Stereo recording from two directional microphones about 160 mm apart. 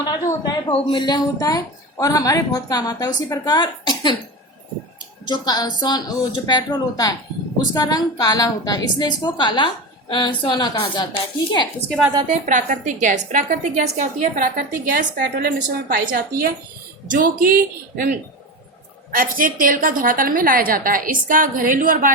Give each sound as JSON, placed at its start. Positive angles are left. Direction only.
{"t": 0.0, "sound": "a sound", "side_deg": 25}
{"t": 0.7, "sound": "a woman's voice", "side_deg": 30}
{"t": 5.2, "sound": "a woman's voice", "side_deg": 25}
{"t": 12.3, "sound": "a woman's voice", "side_deg": -50}